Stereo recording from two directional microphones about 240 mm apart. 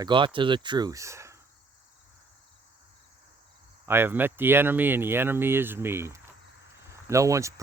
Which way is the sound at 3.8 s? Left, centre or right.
Centre.